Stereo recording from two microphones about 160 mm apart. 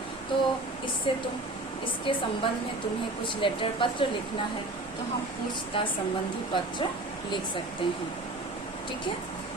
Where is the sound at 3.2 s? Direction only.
30° left (ahead or behind).